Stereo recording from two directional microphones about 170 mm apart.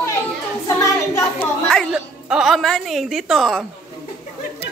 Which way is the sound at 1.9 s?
5° right (ahead or behind).